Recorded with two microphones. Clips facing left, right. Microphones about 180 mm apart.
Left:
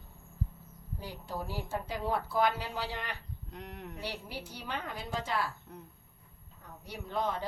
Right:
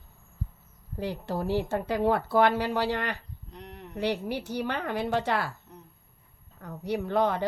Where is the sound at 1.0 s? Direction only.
70° right (ahead or behind).